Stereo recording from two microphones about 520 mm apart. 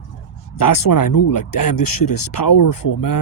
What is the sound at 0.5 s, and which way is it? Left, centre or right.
Speech, left.